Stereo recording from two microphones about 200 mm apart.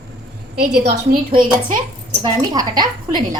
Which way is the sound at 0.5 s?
55° right (ahead or behind).